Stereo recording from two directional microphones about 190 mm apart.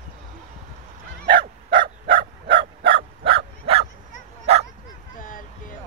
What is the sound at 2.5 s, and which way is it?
Bow-wow, 70° right (ahead or behind).